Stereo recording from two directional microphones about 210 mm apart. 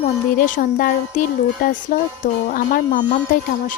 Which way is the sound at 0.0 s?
40° left (ahead or behind).